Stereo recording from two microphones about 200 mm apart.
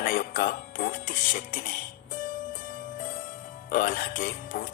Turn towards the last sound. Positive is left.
turn(degrees=45)  # may be behind; listen again after turning